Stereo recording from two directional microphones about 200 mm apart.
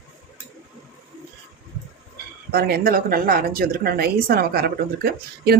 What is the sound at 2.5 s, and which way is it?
A woman's voice, 50° right (ahead or behind).